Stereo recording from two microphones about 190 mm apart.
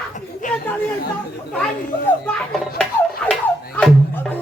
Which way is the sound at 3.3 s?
5° left (ahead or behind).